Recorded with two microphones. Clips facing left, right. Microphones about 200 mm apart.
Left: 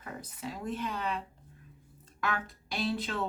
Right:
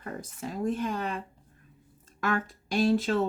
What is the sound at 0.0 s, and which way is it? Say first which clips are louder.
Speech: right 4 dB; 45° right (ahead or behind).